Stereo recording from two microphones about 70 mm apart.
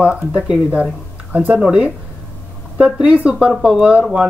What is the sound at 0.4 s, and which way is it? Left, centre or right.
Speech, centre.